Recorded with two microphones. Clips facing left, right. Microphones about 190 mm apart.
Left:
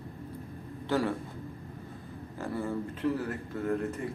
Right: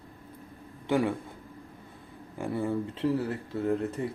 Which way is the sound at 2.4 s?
20° right (ahead or behind).